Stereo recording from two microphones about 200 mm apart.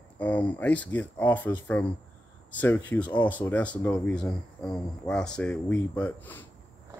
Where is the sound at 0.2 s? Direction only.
10° left (ahead or behind).